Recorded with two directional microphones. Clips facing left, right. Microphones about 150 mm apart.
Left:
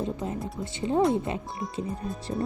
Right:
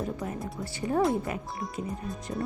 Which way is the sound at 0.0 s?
25° left (ahead or behind).